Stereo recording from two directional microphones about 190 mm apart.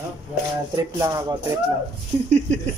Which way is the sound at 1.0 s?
20° right (ahead or behind).